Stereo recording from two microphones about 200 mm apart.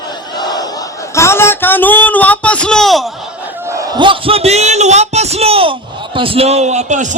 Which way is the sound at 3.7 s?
20° right (ahead or behind).